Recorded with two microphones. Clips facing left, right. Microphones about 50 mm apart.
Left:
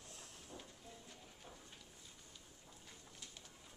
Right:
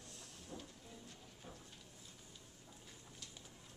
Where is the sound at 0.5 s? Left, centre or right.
Centre.